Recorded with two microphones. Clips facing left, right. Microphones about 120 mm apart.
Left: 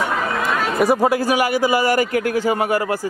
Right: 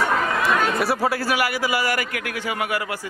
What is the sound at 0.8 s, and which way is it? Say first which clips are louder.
A man's voice: left 6 dB; 15° left (ahead or behind).